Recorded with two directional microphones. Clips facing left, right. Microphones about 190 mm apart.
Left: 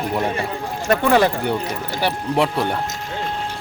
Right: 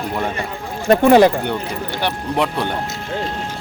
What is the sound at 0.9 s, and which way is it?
Speech, 20° right (ahead or behind).